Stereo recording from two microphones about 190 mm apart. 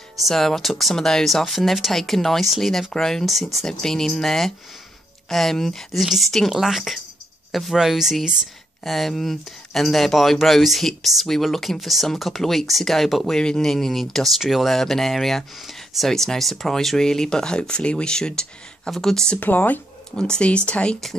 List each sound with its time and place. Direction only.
0.2 s speech: centre (ahead or behind)